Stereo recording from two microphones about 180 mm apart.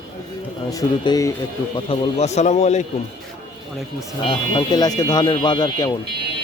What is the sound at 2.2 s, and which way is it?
Speech, 40° left (ahead or behind).